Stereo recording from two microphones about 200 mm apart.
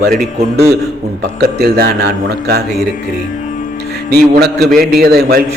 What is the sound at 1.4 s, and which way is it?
A man's voice, 50° right (ahead or behind).